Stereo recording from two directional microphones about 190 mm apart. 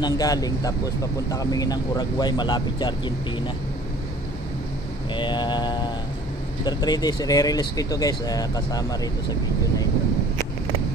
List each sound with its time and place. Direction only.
0.0 s speech: 20° left (ahead or behind)
5.1 s mantra: 25° left (ahead or behind)
6.6 s speech: 20° left (ahead or behind)